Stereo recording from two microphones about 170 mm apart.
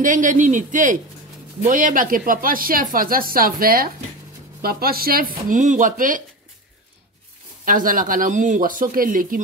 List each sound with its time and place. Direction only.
0.0 s speech: 50° right (ahead or behind)
5.5 s speech: 50° right (ahead or behind)
7.6 s speech: 55° right (ahead or behind)